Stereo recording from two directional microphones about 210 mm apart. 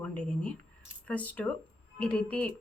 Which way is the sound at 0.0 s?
5° left (ahead or behind).